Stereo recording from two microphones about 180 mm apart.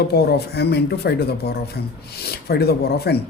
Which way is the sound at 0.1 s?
65° left (ahead or behind).